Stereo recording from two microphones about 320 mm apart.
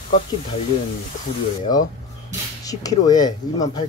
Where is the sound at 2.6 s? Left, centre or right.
Centre.